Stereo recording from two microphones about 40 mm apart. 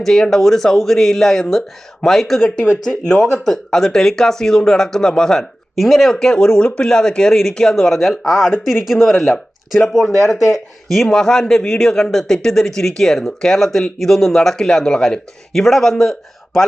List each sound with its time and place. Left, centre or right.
0.0 s a man's voice: centre
2.9 s a man's voice: centre
6.1 s a man's voice: centre
9.1 s a man's voice: centre
15.5 s a man's voice: centre